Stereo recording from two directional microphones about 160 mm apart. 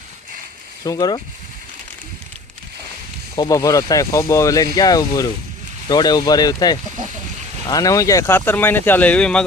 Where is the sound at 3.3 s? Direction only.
20° left (ahead or behind).